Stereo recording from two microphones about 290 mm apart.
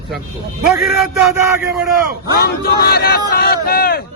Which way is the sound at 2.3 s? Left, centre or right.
Left.